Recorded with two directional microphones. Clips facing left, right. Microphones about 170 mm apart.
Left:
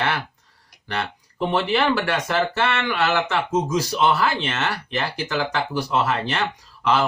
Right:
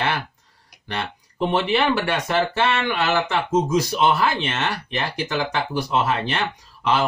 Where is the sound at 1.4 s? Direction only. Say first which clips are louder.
Right 1 dB; 20° right (ahead or behind).